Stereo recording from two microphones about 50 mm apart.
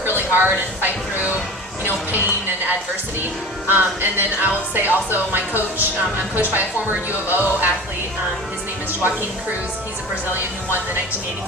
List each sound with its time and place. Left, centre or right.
0.2 s speech: right
3.7 s music: right
8.9 s a woman's voice: right